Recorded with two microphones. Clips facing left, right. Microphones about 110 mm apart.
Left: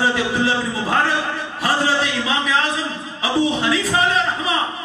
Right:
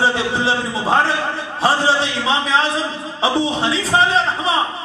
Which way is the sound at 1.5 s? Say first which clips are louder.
Right 3 dB; 30° right (ahead or behind).